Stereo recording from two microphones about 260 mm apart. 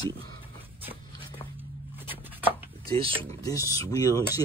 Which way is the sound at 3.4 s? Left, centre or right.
Centre.